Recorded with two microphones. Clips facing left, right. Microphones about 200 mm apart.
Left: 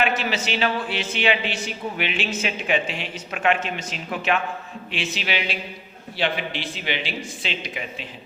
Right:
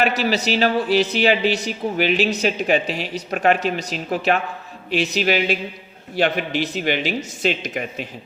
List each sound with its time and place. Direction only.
0.0 s a man's voice: 40° right (ahead or behind)